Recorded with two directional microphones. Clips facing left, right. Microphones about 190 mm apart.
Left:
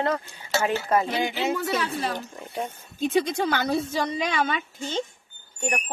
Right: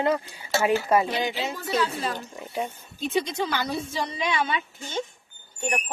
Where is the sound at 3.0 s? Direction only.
50° left (ahead or behind).